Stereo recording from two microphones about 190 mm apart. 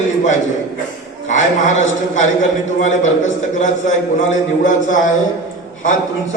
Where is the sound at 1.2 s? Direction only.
40° left (ahead or behind).